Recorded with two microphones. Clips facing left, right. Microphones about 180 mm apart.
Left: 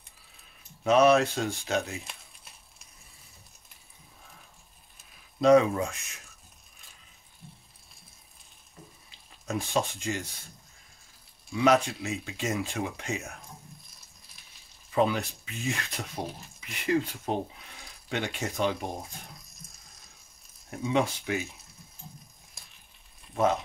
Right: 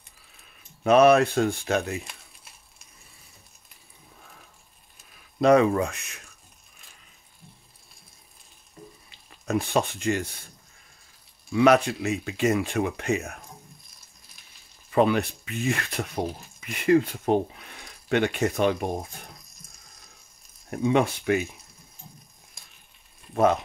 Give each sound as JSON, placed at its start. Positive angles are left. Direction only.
{"t": 0.8, "sound": "speech", "side_deg": -60}
{"t": 5.4, "sound": "speech", "side_deg": -65}
{"t": 9.1, "sound": "speech", "side_deg": -65}
{"t": 11.5, "sound": "speech", "side_deg": -65}
{"t": 14.9, "sound": "speech", "side_deg": -65}
{"t": 20.7, "sound": "speech", "side_deg": -55}
{"t": 22.6, "sound": "a sound", "side_deg": 0}
{"t": 23.3, "sound": "speech", "side_deg": -60}